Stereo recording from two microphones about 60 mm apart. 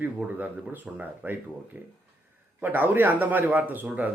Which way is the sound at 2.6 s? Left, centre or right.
Right.